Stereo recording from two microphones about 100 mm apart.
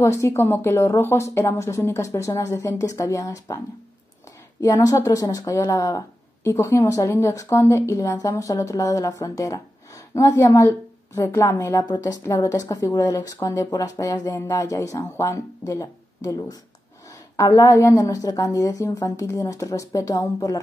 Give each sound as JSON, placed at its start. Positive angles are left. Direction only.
{"t": 0.0, "sound": "speech", "side_deg": 25}
{"t": 4.8, "sound": "a woman's voice", "side_deg": 35}
{"t": 11.7, "sound": "speech", "side_deg": 45}